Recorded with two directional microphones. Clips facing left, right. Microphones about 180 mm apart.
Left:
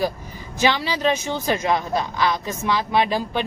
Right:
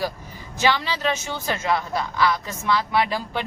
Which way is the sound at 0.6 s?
15° left (ahead or behind).